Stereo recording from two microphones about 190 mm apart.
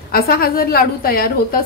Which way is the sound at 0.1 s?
50° left (ahead or behind).